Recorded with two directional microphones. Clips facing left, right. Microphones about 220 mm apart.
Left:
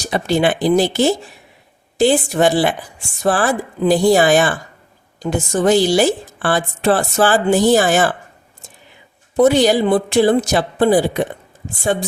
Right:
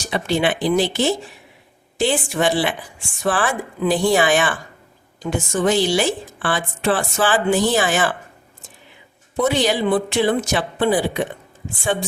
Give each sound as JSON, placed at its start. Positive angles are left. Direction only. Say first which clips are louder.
{"t": 0.0, "sound": "a woman's voice", "louder": "left 4 dB", "side_deg": 40}
{"t": 9.4, "sound": "a woman's voice", "louder": "left 6 dB", "side_deg": 40}